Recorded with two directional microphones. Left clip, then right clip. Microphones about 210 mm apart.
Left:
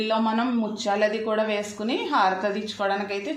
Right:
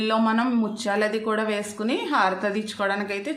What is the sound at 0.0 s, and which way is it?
A woman's voice, 25° right (ahead or behind).